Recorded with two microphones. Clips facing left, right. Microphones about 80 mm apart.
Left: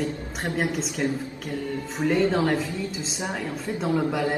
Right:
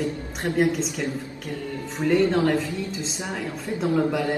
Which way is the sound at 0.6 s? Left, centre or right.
Centre.